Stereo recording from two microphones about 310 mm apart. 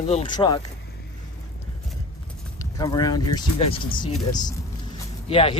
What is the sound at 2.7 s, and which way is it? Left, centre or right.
Speech, centre.